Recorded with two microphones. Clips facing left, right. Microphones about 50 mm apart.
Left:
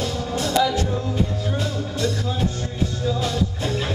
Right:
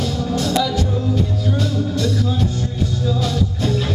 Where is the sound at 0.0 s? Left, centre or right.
Centre.